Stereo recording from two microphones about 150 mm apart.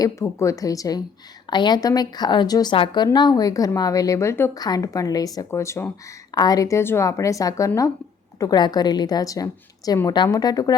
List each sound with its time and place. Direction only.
0.0 s a woman's voice: 20° left (ahead or behind)